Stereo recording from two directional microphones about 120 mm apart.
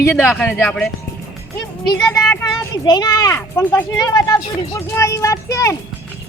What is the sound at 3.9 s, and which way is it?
Speech, 30° left (ahead or behind).